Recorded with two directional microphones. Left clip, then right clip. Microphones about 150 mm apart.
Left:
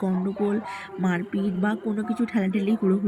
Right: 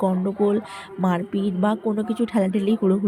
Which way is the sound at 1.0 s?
45° right (ahead or behind).